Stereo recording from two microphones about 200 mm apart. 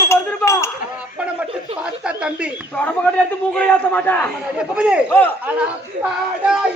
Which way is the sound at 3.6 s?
10° left (ahead or behind).